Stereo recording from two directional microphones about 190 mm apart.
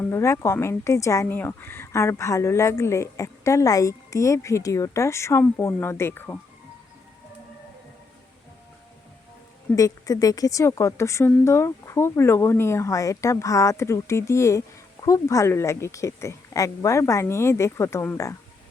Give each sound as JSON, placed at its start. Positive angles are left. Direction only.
{"t": 0.0, "sound": "speech", "side_deg": 15}
{"t": 9.7, "sound": "speech", "side_deg": 20}